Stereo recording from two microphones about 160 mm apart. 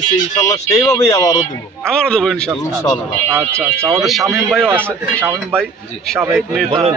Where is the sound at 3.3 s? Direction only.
15° right (ahead or behind).